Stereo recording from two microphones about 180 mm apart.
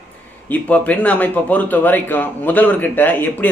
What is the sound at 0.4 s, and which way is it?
A man's voice, 10° left (ahead or behind).